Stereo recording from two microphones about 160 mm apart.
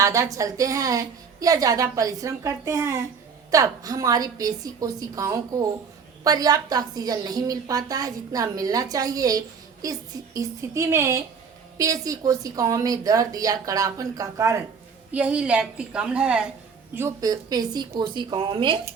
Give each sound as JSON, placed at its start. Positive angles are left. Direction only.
{"t": 0.0, "sound": "a woman's voice", "side_deg": -20}
{"t": 15.1, "sound": "a woman's voice", "side_deg": -10}
{"t": 16.9, "sound": "a woman's voice", "side_deg": -20}